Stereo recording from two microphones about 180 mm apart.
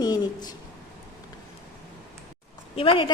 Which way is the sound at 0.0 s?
20° left (ahead or behind).